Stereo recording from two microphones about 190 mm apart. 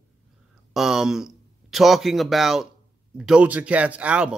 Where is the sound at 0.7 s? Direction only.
Centre (ahead or behind).